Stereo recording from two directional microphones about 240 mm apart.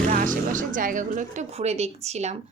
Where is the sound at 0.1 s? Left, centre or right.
Right.